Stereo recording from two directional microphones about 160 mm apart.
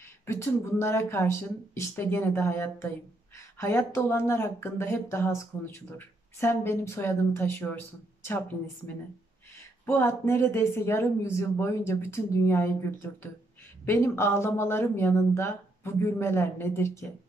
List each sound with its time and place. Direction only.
0.3 s speech: 15° left (ahead or behind)
9.8 s speech: 15° left (ahead or behind)
13.8 s speech: 15° left (ahead or behind)